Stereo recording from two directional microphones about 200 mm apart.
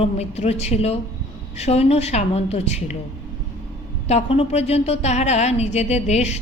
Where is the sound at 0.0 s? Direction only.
30° left (ahead or behind).